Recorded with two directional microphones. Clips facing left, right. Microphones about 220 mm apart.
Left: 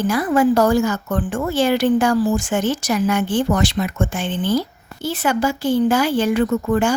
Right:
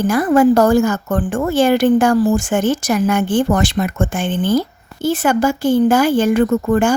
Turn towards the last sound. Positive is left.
turn(degrees=-50)  # may be behind; listen again after turning